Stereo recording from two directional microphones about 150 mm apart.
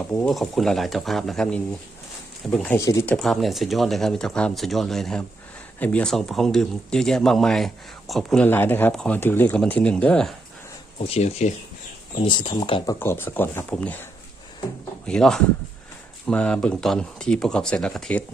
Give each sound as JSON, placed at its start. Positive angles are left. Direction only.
{"t": 0.1, "sound": "speech", "side_deg": 10}
{"t": 2.7, "sound": "speech", "side_deg": 20}
{"t": 3.2, "sound": "speech", "side_deg": 0}
{"t": 8.4, "sound": "speech", "side_deg": 15}
{"t": 10.9, "sound": "speech", "side_deg": 45}
{"t": 12.2, "sound": "speech", "side_deg": 35}